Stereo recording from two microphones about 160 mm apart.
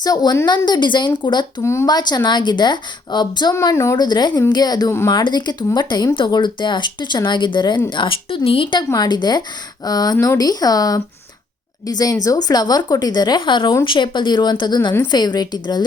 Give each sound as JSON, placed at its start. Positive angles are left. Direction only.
{"t": 0.0, "sound": "speech", "side_deg": 25}
{"t": 1.6, "sound": "a woman's voice", "side_deg": 15}